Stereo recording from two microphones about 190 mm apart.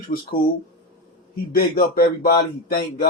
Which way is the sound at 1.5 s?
50° left (ahead or behind).